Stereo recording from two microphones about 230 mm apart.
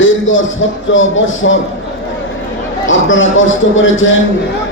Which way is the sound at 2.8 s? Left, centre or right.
Left.